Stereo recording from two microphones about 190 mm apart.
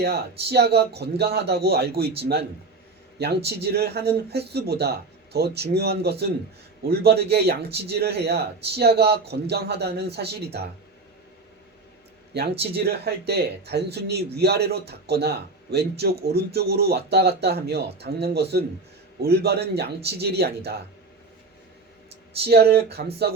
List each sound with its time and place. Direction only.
0.0 s a man's voice: 60° right (ahead or behind)
12.3 s a man's voice: 60° right (ahead or behind)
22.4 s a man's voice: 55° right (ahead or behind)